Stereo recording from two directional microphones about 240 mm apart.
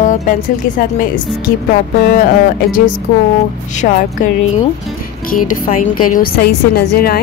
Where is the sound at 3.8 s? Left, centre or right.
Left.